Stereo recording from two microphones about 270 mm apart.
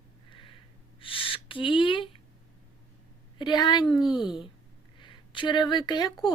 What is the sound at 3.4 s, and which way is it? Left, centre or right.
Speech, centre.